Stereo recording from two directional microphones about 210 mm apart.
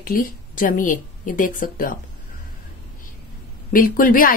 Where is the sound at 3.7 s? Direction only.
40° left (ahead or behind).